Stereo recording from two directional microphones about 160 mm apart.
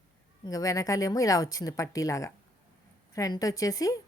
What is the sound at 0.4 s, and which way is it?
A woman's voice, 20° left (ahead or behind).